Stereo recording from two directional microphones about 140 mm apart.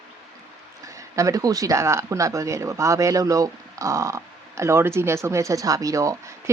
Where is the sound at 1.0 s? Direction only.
20° right (ahead or behind).